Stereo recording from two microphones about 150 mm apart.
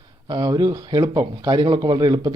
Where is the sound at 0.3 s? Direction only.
25° right (ahead or behind).